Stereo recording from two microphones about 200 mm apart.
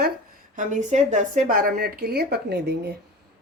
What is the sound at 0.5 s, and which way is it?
Speech, 35° right (ahead or behind).